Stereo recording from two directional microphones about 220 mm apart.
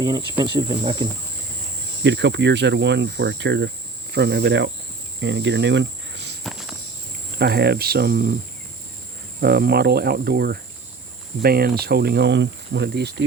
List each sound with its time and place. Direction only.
0.3 s cricket: 20° right (ahead or behind)
2.0 s speech: 55° right (ahead or behind)
5.2 s cricket: 55° right (ahead or behind)
6.4 s walk: centre (ahead or behind)
7.3 s speech: 45° right (ahead or behind)
9.4 s speech: 45° right (ahead or behind)